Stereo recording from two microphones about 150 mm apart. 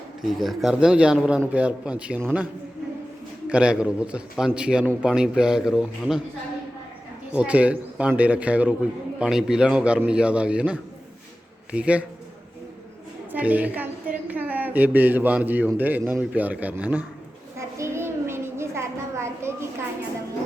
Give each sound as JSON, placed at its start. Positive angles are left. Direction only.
{"t": 0.2, "sound": "a man's voice", "side_deg": 0}
{"t": 3.5, "sound": "a man's voice", "side_deg": -5}
{"t": 7.3, "sound": "a man's voice", "side_deg": -10}
{"t": 13.3, "sound": "a woman's voice", "side_deg": -10}
{"t": 17.6, "sound": "a sound", "side_deg": -20}